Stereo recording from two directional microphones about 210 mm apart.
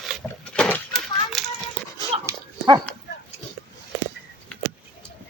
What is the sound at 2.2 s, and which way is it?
Dog, 15° right (ahead or behind).